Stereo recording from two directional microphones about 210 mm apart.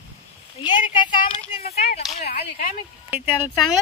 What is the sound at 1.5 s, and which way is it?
Speech, 30° left (ahead or behind).